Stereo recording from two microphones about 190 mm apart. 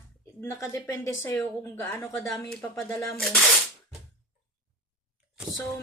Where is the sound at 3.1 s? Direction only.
Centre (ahead or behind).